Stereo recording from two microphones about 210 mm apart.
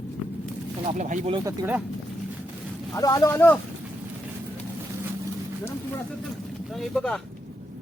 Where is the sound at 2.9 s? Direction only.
15° left (ahead or behind).